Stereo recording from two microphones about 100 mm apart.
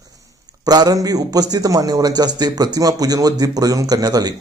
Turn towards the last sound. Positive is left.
turn(degrees=-40)  # may be behind; listen again after turning